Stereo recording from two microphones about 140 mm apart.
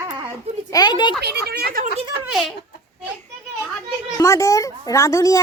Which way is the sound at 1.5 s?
90° right.